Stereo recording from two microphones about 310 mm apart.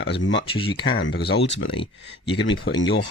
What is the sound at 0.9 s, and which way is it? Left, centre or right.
Speech, left.